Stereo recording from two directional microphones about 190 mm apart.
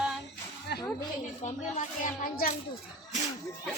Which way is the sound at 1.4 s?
40° left (ahead or behind).